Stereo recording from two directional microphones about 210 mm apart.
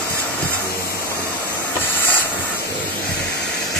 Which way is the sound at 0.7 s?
45° left (ahead or behind).